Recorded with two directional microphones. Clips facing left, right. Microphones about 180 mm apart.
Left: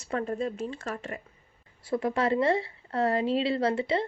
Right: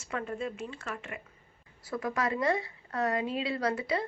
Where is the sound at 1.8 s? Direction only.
25° left (ahead or behind).